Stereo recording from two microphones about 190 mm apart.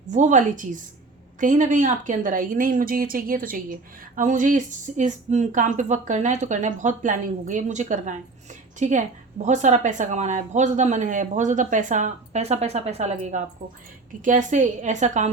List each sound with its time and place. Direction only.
0.1 s a woman's voice: 40° right (ahead or behind)